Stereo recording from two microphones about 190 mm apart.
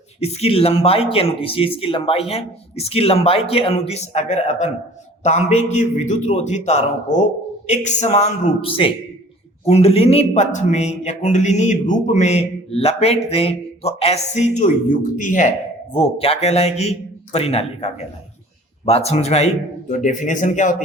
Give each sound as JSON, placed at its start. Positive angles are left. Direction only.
{"t": 0.2, "sound": "a man's voice", "side_deg": 30}
{"t": 16.0, "sound": "a man's voice", "side_deg": 30}